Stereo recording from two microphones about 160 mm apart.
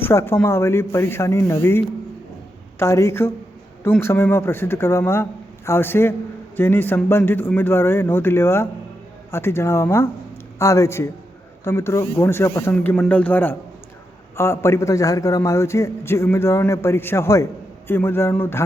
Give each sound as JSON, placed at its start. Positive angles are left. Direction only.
{"t": 0.0, "sound": "a man's voice", "side_deg": 15}